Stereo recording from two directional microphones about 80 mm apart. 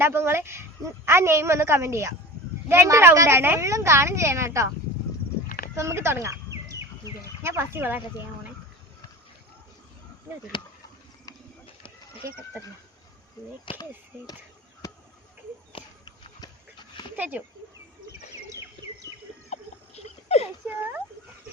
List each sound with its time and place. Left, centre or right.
0.0 s a woman's voice: right
3.7 s a woman's voice: right
5.7 s speech: right
10.5 s speech: left
13.7 s speech: left
14.8 s a sound: left
15.7 s horse: left
17.2 s speech: right
18.8 s bird: right